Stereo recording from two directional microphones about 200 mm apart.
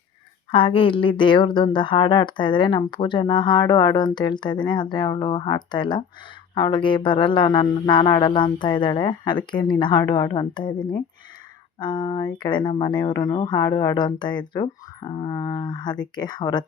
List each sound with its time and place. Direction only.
0.5 s a woman's voice: 25° left (ahead or behind)